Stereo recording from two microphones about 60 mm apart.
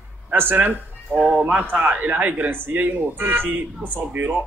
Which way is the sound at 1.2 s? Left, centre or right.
Right.